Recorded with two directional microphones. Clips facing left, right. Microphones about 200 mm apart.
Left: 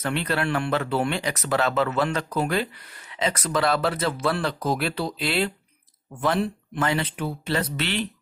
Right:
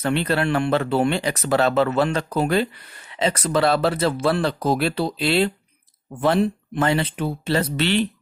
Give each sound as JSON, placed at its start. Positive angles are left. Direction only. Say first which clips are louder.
{"t": 0.0, "sound": "speech", "louder": "right 4 dB", "side_deg": -30}